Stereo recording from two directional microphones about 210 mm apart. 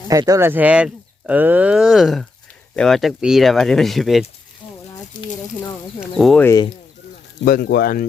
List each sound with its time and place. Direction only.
0.1 s speech: 15° right (ahead or behind); by 4.3 s centre (ahead or behind)
6.0 s speech: centre (ahead or behind)
7.4 s speech: 45° left (ahead or behind)